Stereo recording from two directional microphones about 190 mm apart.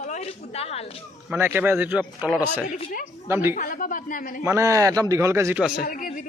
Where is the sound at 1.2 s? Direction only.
10° right (ahead or behind).